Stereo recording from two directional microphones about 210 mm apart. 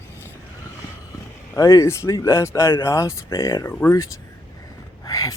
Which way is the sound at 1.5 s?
15° left (ahead or behind).